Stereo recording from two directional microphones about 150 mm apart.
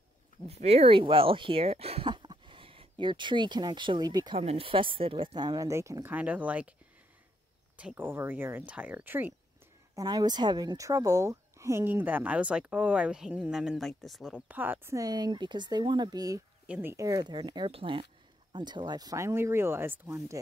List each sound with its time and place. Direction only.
0.5 s speech: 45° right (ahead or behind); by 4.4 s 25° right (ahead or behind)
4.4 s speech: 40° right (ahead or behind); by 6.7 s 10° right (ahead or behind)
7.7 s a woman's voice: 10° right (ahead or behind)
9.9 s a woman's voice: 25° right (ahead or behind); by 14.4 s centre (ahead or behind)
14.5 s speech: 15° right (ahead or behind)
16.6 s speech: 10° right (ahead or behind)
16.9 s speech: 25° right (ahead or behind)